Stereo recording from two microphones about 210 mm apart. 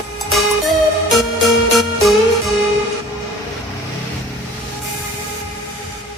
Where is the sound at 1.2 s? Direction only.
Centre (ahead or behind).